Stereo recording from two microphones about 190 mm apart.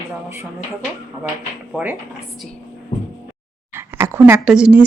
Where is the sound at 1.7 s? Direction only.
10° right (ahead or behind).